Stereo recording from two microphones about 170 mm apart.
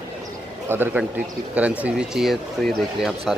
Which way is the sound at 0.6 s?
15° right (ahead or behind).